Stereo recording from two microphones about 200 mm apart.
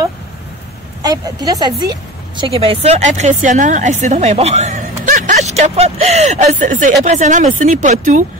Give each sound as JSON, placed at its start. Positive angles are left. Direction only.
{"t": 1.0, "sound": "speech", "side_deg": -20}